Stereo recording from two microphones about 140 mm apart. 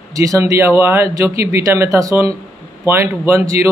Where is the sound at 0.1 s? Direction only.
25° right (ahead or behind).